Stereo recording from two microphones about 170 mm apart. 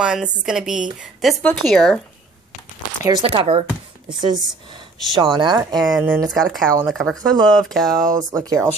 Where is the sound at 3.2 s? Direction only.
35° right (ahead or behind).